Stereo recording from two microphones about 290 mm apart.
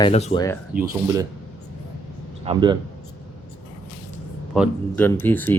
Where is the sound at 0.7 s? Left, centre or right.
Centre.